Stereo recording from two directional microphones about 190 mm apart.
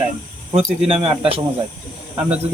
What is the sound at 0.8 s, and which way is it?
Speech, 30° right (ahead or behind).